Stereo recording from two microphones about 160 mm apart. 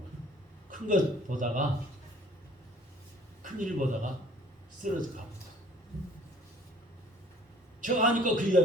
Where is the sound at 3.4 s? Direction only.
55° right (ahead or behind).